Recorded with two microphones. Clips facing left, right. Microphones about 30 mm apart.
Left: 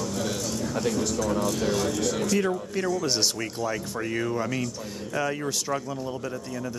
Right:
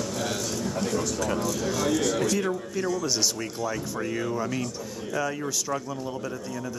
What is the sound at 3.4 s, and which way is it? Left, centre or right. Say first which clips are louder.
Speech: left 1 dB; centre.